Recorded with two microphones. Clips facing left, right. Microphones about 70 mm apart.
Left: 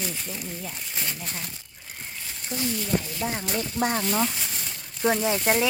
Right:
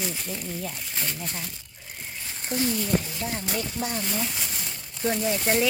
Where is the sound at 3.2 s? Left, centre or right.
Left.